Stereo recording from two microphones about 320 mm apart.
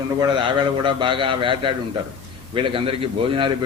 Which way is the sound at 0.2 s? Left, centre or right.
Centre.